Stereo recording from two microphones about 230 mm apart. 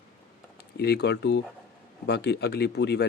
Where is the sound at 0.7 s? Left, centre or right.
Left.